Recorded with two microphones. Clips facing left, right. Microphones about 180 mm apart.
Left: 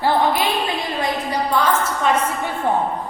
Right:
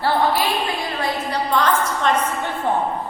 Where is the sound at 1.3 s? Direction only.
10° left (ahead or behind).